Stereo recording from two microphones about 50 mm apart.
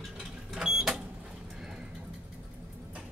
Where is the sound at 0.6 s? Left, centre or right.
Centre.